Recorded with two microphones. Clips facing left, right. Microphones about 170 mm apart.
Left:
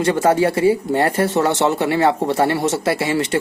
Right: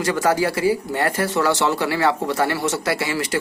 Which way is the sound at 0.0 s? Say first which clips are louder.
Left 4 dB; 30° left (ahead or behind).